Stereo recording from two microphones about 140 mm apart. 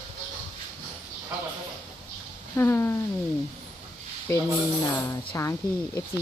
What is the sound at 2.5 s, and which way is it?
Speech, 20° left (ahead or behind).